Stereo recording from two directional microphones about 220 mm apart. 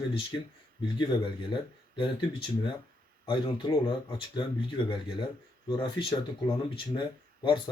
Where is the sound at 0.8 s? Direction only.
20° left (ahead or behind).